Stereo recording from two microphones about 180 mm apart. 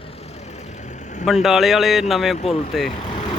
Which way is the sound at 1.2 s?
Centre (ahead or behind).